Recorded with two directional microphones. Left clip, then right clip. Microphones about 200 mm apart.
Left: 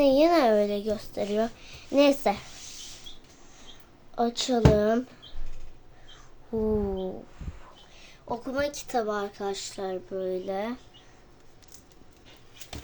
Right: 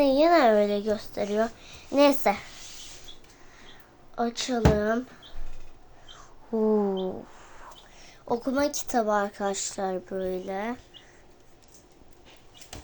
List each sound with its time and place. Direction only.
0.0 s speech: 10° left (ahead or behind)
4.1 s speech: 10° left (ahead or behind)
6.1 s a sound: 5° right (ahead or behind)
8.2 s a woman's voice: 25° right (ahead or behind)
10.2 s speech: 5° left (ahead or behind)